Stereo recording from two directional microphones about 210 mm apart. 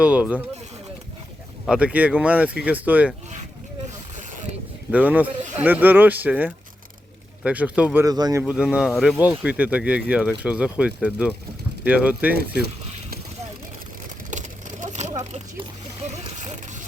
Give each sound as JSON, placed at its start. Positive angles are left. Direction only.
{"t": 0.0, "sound": "speech", "side_deg": -5}
{"t": 1.6, "sound": "speech", "side_deg": -5}
{"t": 4.9, "sound": "speech", "side_deg": -5}
{"t": 14.3, "sound": "a sound", "side_deg": -35}